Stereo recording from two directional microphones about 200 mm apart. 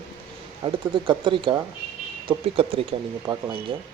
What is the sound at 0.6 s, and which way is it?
Speech, 25° right (ahead or behind).